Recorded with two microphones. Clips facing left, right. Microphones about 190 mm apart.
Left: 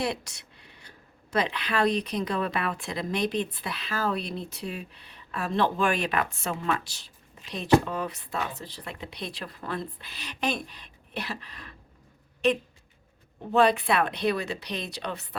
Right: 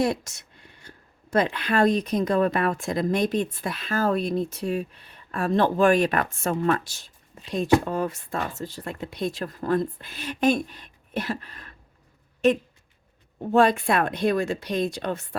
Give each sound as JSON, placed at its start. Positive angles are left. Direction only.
{"t": 0.0, "sound": "speech", "side_deg": -45}
{"t": 13.5, "sound": "speech", "side_deg": -45}